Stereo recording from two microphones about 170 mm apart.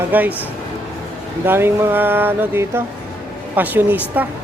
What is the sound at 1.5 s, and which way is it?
Speech, 15° right (ahead or behind).